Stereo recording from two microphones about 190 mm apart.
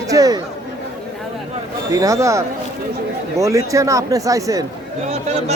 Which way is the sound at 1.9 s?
15° right (ahead or behind).